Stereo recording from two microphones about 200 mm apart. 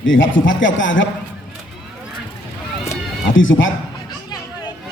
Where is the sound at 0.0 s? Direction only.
70° left (ahead or behind).